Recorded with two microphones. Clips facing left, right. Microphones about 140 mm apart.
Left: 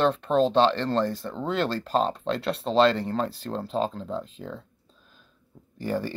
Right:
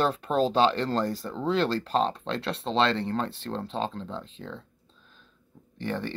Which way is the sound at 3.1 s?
35° left (ahead or behind).